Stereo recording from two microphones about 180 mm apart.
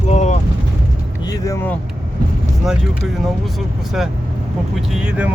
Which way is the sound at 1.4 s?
15° left (ahead or behind).